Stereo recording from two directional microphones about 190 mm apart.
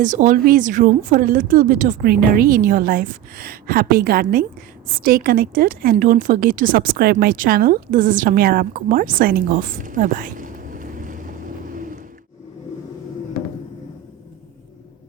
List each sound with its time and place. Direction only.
0.0 s a woman's voice: 40° right (ahead or behind)